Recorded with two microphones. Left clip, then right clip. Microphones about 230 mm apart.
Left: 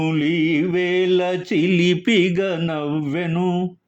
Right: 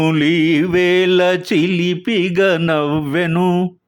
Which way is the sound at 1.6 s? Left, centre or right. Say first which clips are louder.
Even; centre.